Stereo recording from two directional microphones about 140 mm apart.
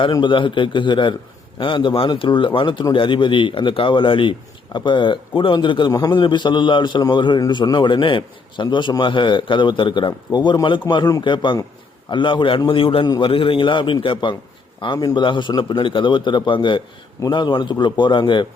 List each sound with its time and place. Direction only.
0.0 s a man's voice: 35° left (ahead or behind)